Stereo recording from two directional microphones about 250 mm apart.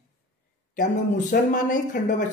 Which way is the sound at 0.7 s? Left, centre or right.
Left.